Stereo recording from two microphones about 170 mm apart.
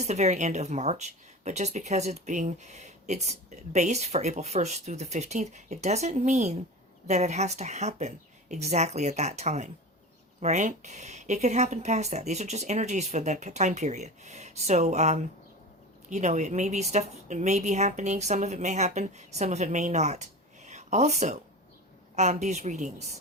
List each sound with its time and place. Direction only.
0.0 s a woman's voice: 40° right (ahead or behind)